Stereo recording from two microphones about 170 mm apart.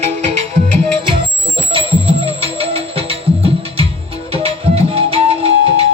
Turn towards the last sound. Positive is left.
turn(degrees=-35)  # may be behind; listen again after turning